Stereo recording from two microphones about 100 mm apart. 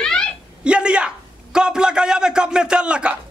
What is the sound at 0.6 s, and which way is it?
A woman's voice, 10° right (ahead or behind).